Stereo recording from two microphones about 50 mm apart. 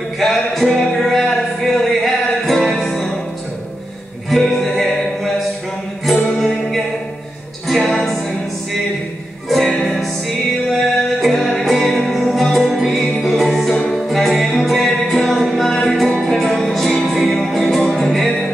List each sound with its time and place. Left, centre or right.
0.2 s music: centre
4.3 s music: centre
6.3 s music: centre
9.7 s music: centre
9.9 s music: centre